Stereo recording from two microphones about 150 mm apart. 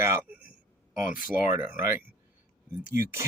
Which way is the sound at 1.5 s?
15° right (ahead or behind).